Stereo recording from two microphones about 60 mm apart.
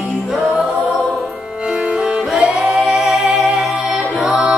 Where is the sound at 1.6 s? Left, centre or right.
Centre.